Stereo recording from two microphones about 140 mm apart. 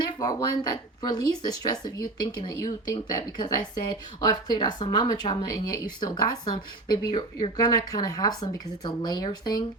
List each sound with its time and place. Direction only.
0.0 s speech: 25° left (ahead or behind)